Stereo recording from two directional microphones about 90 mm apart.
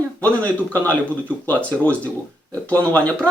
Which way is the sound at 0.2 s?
15° left (ahead or behind).